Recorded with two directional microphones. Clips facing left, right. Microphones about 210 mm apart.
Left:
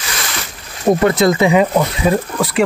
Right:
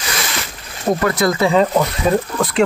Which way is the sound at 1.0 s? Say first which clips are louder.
Left 3 dB; 25° left (ahead or behind).